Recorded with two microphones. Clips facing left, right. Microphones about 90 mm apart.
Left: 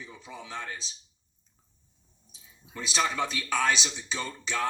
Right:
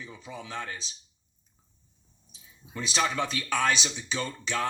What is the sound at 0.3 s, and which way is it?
Speech, 15° left (ahead or behind).